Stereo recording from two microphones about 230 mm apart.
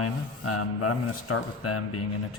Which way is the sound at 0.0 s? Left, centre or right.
Left.